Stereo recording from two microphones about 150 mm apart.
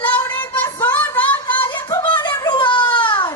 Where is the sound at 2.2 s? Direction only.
30° left (ahead or behind).